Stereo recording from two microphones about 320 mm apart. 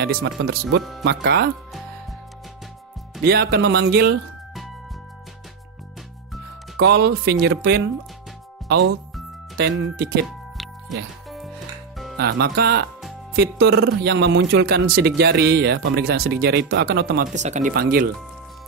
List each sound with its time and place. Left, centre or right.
0.0 s speech: right
3.3 s speech: right
6.8 s speech: right
10.2 s music: centre
12.2 s speech: right